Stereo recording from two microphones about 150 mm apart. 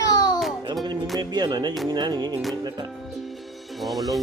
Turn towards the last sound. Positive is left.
turn(degrees=0)  # may be behind; listen again after turning